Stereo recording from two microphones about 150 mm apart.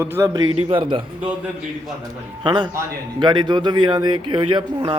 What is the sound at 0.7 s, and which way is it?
Speech, 35° right (ahead or behind).